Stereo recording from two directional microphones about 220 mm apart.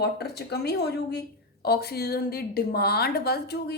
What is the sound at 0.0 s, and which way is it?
A woman's voice, 50° left (ahead or behind).